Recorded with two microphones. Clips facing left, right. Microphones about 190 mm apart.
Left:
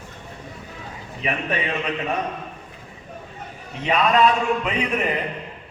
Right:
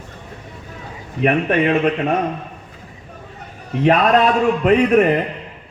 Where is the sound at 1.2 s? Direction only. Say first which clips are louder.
Right 10 dB; 55° right (ahead or behind).